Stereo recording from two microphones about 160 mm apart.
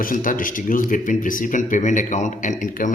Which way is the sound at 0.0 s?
60° left (ahead or behind).